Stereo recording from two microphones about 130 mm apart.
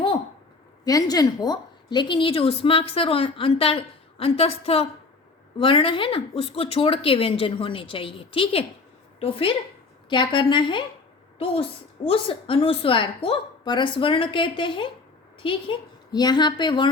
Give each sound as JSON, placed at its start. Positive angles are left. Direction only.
{"t": 0.9, "sound": "a woman's voice", "side_deg": 30}
{"t": 12.0, "sound": "a woman's voice", "side_deg": 45}
{"t": 16.1, "sound": "a woman's voice", "side_deg": 35}